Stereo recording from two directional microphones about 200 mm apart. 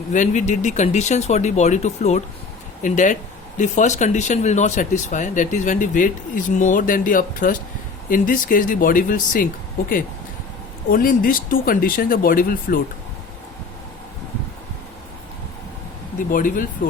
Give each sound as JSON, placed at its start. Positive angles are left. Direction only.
{"t": 0.1, "sound": "speech", "side_deg": 40}
{"t": 16.3, "sound": "speech", "side_deg": 40}